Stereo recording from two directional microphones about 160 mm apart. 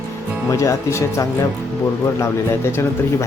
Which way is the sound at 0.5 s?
20° left (ahead or behind).